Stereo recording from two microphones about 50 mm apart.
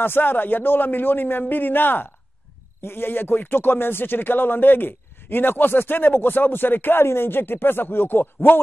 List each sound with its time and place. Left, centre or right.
0.0 s speech: left